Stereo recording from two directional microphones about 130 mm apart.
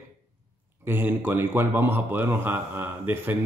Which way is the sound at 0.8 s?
15° right (ahead or behind).